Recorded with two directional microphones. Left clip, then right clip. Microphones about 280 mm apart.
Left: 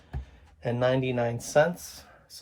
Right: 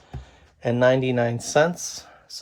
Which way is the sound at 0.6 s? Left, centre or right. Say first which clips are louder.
Right 7 dB; right.